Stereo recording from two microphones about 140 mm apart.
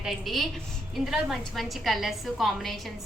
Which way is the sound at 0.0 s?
Centre (ahead or behind).